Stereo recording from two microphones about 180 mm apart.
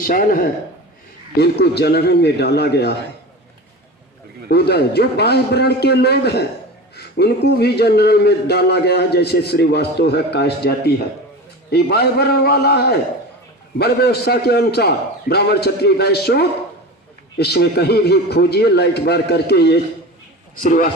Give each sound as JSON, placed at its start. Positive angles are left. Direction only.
{"t": 0.0, "sound": "speech", "side_deg": 50}
{"t": 1.4, "sound": "a man's voice", "side_deg": 65}
{"t": 4.4, "sound": "a man's voice", "side_deg": 65}
{"t": 20.6, "sound": "speech", "side_deg": 45}